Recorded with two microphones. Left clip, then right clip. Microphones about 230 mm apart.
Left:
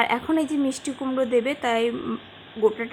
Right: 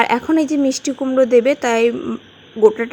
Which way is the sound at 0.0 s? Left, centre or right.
Centre.